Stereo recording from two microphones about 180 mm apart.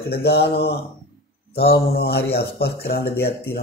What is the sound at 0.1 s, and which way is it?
Speech, 65° left (ahead or behind).